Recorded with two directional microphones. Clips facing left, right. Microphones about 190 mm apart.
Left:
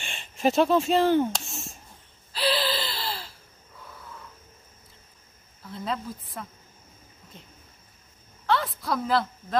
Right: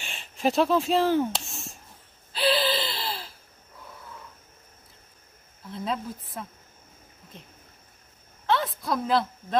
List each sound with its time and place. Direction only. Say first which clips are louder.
0.0 s speech: left 1 dB; 5° right (ahead or behind)
2.3 s gasp: right 2 dB; centre (ahead or behind)
5.7 s a woman's voice: right 1 dB; centre (ahead or behind)
8.5 s a sound: even; centre (ahead or behind)